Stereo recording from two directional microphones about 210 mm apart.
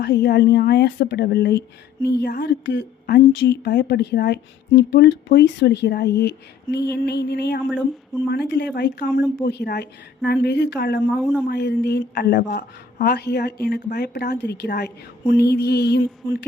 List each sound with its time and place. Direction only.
0.0 s speech: 50° left (ahead or behind)
7.7 s speech: 5° right (ahead or behind)
8.3 s speech: 50° left (ahead or behind)
11.1 s speech: 5° right (ahead or behind)
11.4 s speech: 50° left (ahead or behind)